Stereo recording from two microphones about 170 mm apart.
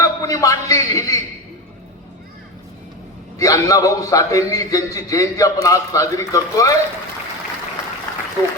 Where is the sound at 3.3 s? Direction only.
20° left (ahead or behind).